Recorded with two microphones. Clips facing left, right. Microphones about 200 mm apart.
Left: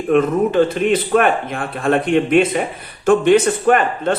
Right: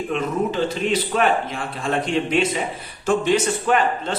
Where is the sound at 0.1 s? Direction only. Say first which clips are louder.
Left 10 dB; 55° left (ahead or behind).